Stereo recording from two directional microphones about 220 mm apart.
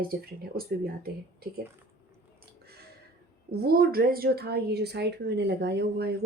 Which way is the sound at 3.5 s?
45° right (ahead or behind).